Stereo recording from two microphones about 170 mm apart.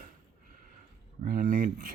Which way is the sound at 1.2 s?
55° right (ahead or behind).